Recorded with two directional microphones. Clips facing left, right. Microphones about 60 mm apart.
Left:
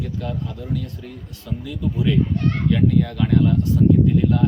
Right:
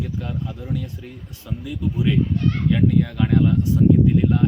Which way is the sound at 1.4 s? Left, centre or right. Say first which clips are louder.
Even; centre.